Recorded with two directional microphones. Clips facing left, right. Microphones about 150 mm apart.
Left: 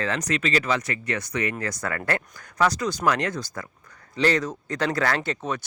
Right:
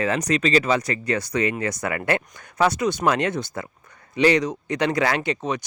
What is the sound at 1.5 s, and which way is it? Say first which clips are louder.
Speech: right 4 dB; 20° right (ahead or behind).